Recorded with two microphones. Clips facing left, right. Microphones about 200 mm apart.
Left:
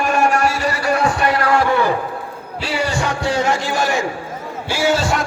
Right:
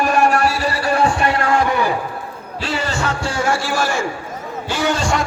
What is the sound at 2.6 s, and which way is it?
Music, 10° left (ahead or behind).